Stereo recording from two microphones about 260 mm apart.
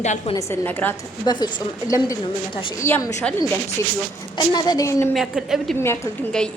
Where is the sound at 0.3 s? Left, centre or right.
Centre.